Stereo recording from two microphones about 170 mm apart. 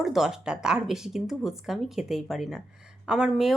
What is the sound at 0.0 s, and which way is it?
Speech, 5° right (ahead or behind).